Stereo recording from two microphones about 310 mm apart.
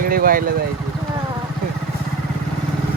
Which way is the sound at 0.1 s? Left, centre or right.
Right.